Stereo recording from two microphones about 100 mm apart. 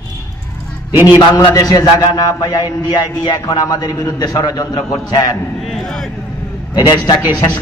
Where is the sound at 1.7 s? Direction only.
40° left (ahead or behind).